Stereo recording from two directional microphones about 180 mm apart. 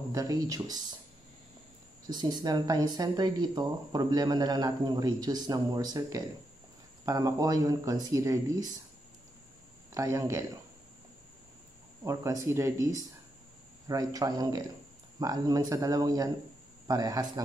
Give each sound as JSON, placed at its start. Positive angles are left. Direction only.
{"t": 0.1, "sound": "speech", "side_deg": -20}
{"t": 2.0, "sound": "speech", "side_deg": -25}
{"t": 9.9, "sound": "speech", "side_deg": -15}
{"t": 12.0, "sound": "speech", "side_deg": -15}